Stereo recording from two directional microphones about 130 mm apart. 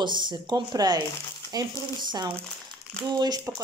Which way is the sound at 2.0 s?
35° right (ahead or behind).